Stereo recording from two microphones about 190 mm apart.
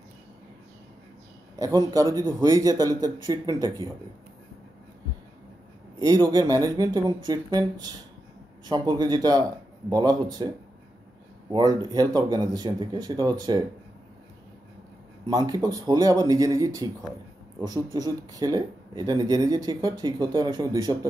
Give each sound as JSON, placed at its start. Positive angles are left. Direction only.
{"t": 1.6, "sound": "speech", "side_deg": -15}
{"t": 5.9, "sound": "speech", "side_deg": -20}
{"t": 11.5, "sound": "speech", "side_deg": -20}
{"t": 15.2, "sound": "speech", "side_deg": -20}
{"t": 17.9, "sound": "speech", "side_deg": -20}